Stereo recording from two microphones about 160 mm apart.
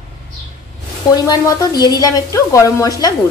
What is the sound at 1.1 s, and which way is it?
A woman's voice, 25° left (ahead or behind).